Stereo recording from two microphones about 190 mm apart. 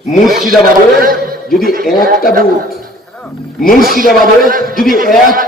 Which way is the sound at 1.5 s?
50° left (ahead or behind).